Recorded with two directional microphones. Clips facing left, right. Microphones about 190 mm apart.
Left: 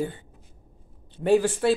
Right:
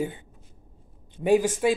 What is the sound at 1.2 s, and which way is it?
Speech, 10° right (ahead or behind).